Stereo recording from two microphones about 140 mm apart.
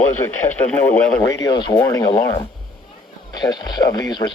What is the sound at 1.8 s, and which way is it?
Speech, 25° left (ahead or behind).